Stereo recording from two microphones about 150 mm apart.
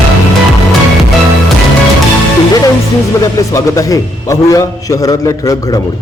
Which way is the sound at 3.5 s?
20° left (ahead or behind).